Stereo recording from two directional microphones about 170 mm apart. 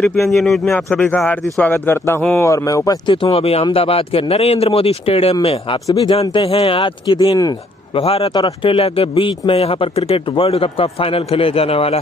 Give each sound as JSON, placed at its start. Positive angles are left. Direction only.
{"t": 0.3, "sound": "speech", "side_deg": 0}
{"t": 5.9, "sound": "speech", "side_deg": 20}
{"t": 6.4, "sound": "speech", "side_deg": 35}
{"t": 8.0, "sound": "speech", "side_deg": 35}
{"t": 8.4, "sound": "speech", "side_deg": 25}
{"t": 8.7, "sound": "speech", "side_deg": 35}